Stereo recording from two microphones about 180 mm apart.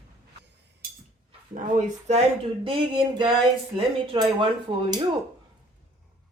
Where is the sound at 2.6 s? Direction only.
30° right (ahead or behind).